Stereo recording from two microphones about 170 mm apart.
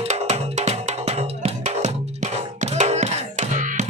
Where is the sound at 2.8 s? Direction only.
40° right (ahead or behind).